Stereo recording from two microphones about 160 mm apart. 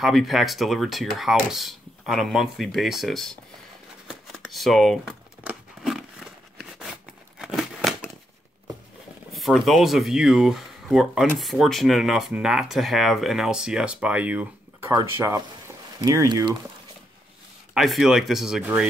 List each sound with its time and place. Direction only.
0.0 s speech: centre (ahead or behind)
4.1 s crumpling: centre (ahead or behind)
9.3 s speech: centre (ahead or behind); by 16.5 s 25° right (ahead or behind)
17.7 s speech: centre (ahead or behind)